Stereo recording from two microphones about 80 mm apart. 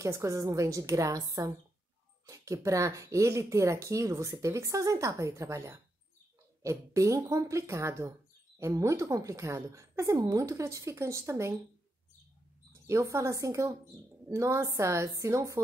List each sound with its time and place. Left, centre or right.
0.0 s a woman's voice: right
12.8 s speech: right